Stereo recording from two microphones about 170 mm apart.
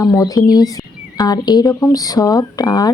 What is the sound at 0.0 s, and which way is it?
Speech, 20° left (ahead or behind).